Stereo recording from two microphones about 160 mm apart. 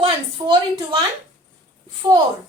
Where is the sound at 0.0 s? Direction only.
35° right (ahead or behind).